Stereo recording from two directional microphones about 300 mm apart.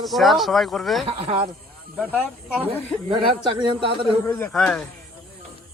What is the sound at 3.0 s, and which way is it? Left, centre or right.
A man's voice, centre.